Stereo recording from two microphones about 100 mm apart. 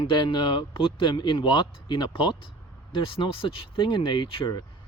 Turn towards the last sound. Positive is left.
turn(degrees=55)  # may be behind; listen again after turning